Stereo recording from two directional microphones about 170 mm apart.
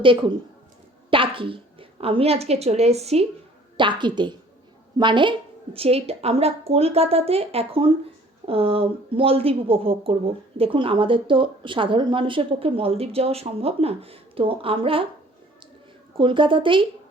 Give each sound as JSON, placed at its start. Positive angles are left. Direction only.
{"t": 0.0, "sound": "a woman's voice", "side_deg": -30}
{"t": 3.8, "sound": "a woman's voice", "side_deg": -30}
{"t": 16.1, "sound": "a woman's voice", "side_deg": -30}